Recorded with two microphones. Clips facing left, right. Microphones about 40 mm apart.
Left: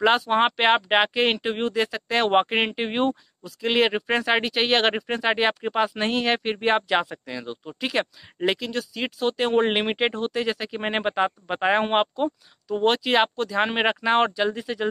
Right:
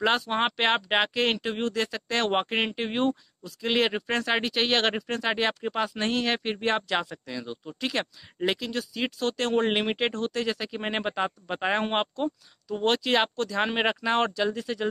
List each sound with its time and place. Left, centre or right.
0.0 s speech: centre
4.9 s speech: centre
7.9 s speech: centre
9.3 s speech: centre
12.6 s speech: centre